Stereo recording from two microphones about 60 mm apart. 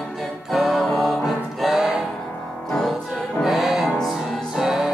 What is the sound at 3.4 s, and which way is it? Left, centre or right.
Music, centre.